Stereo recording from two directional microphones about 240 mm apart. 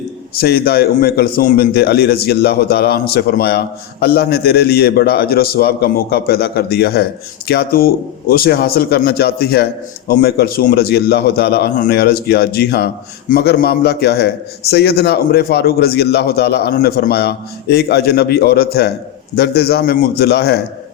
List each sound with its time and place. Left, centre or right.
0.3 s a man's voice: left